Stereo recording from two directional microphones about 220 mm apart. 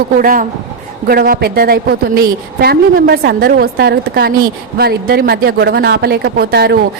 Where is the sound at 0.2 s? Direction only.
40° right (ahead or behind).